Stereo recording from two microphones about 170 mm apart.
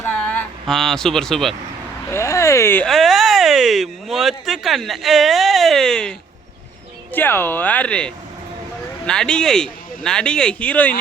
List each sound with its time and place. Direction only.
0.0 s a sound: 10° left (ahead or behind)
2.0 s speech: 15° left (ahead or behind)
2.8 s speech: centre (ahead or behind)